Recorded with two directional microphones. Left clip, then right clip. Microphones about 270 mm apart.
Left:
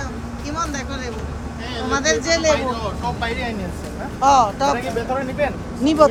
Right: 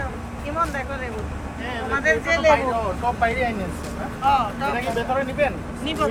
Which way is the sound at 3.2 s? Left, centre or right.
Right.